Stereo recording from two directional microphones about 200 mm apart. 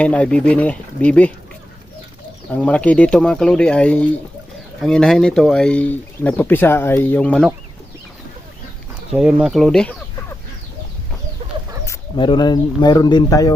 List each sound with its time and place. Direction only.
0.0 s speech: 5° left (ahead or behind)
2.5 s speech: 5° left (ahead or behind)
9.1 s speech: 5° right (ahead or behind)
12.1 s speech: 25° left (ahead or behind)